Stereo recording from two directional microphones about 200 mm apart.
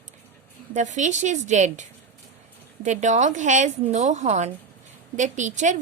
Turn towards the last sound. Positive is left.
turn(degrees=-35)  # may be behind; listen again after turning